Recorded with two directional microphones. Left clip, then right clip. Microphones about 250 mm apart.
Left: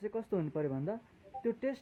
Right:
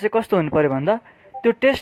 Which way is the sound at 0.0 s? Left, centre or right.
Right.